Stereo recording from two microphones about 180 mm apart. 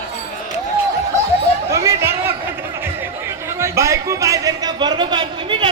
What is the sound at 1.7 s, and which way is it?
Chatter, 15° right (ahead or behind).